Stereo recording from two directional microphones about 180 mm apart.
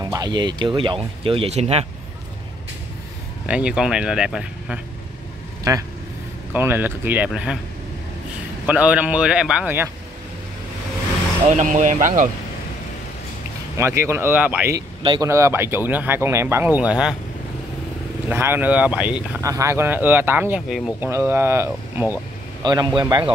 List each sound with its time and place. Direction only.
0.1 s speech: 25° right (ahead or behind)
3.4 s speech: 5° right (ahead or behind)
5.6 s speech: 20° right (ahead or behind)
8.6 s speech: 10° right (ahead or behind)
11.5 s speech: 45° right (ahead or behind)
13.7 s speech: 15° right (ahead or behind)
18.3 s a man's voice: 10° right (ahead or behind)